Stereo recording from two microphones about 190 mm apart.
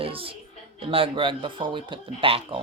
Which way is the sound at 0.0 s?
30° right (ahead or behind).